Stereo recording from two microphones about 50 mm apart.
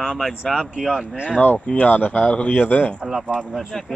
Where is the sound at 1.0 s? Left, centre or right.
Centre.